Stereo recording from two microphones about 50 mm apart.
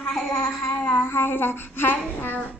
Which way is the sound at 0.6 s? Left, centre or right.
Left.